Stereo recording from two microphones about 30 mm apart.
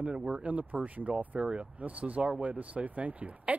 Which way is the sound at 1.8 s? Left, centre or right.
Right.